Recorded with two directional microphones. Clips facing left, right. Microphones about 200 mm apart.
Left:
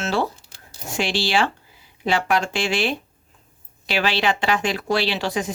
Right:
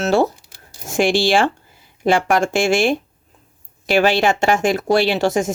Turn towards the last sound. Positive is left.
turn(degrees=-45)  # may be behind; listen again after turning